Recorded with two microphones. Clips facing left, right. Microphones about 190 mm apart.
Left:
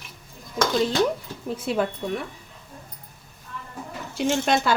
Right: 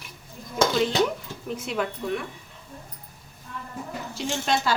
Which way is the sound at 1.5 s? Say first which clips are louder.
Left 5 dB; 30° left (ahead or behind).